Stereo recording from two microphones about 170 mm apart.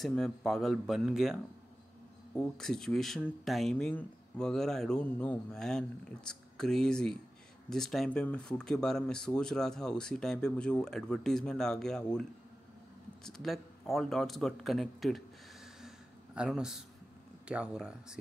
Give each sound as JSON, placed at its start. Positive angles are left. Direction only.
{"t": 0.0, "sound": "speech", "side_deg": 0}
{"t": 2.5, "sound": "a man's voice", "side_deg": 5}